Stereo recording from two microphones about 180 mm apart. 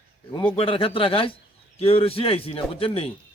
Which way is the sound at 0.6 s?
30° left (ahead or behind).